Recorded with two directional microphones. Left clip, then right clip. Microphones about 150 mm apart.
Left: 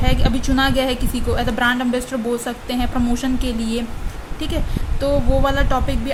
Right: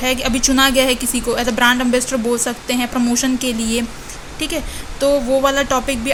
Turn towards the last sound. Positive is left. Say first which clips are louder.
# right 4 dB
turn(degrees=-15)  # may be behind; listen again after turning